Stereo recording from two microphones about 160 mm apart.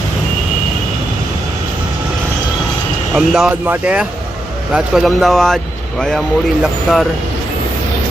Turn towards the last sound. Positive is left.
turn(degrees=0)  # may be behind; listen again after turning